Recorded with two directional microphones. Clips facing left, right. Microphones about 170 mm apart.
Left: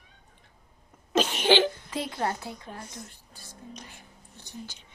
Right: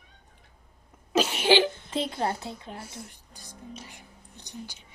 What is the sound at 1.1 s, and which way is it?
Cough, 10° right (ahead or behind).